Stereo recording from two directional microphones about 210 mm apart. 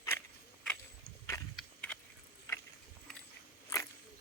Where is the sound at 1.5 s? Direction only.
5° left (ahead or behind).